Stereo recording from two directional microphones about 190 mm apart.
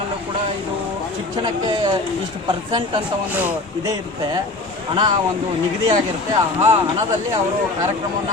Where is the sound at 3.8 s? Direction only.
20° right (ahead or behind).